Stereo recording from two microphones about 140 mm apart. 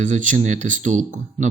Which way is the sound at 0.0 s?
60° right (ahead or behind).